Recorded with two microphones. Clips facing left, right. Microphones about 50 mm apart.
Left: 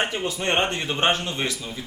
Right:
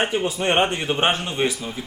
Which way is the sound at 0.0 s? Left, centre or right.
Centre.